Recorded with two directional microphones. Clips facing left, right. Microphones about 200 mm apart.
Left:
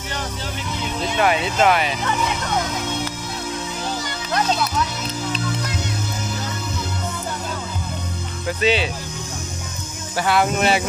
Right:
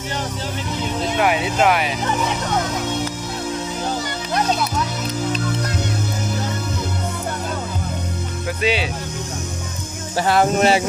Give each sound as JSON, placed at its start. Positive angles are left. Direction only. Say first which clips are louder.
{"t": 1.2, "sound": "speech", "louder": "even", "side_deg": -10}
{"t": 8.5, "sound": "speech", "louder": "left 2 dB", "side_deg": -10}
{"t": 10.1, "sound": "speech", "louder": "right 3 dB", "side_deg": -40}